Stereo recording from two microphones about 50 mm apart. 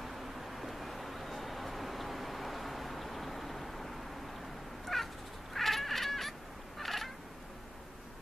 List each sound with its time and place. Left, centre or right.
0.0 s vehicle: centre
4.8 s cat: centre